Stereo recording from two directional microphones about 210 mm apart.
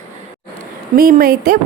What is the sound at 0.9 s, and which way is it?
Speech, 45° right (ahead or behind).